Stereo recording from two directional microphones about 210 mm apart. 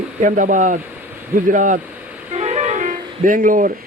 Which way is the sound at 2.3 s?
30° right (ahead or behind).